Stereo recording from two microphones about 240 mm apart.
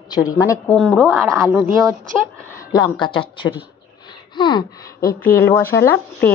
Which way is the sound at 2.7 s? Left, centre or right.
Centre.